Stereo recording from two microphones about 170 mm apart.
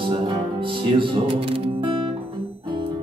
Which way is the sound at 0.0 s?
30° right (ahead or behind).